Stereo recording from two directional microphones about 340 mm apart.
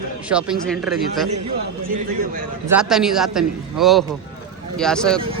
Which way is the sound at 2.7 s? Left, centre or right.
Centre.